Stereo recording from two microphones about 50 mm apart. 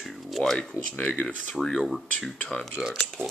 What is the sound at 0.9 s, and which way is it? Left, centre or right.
Speech, left.